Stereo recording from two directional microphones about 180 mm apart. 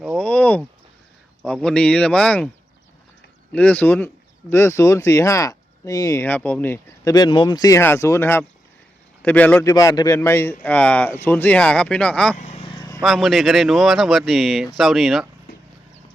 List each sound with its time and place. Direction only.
0.0 s a sound: 5° left (ahead or behind)
1.4 s speech: 5° left (ahead or behind)
3.5 s speech: 10° left (ahead or behind)
12.4 s vehicle: 35° left (ahead or behind)
13.0 s speech: centre (ahead or behind)